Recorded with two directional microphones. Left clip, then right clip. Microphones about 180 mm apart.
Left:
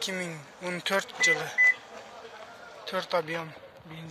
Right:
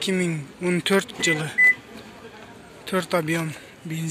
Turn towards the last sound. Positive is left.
turn(degrees=-5)  # may be behind; listen again after turning